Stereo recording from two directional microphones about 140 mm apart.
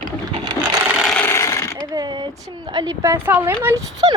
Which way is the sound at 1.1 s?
15° left (ahead or behind).